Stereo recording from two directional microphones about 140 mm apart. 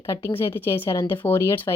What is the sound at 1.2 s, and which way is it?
Speech, 15° left (ahead or behind).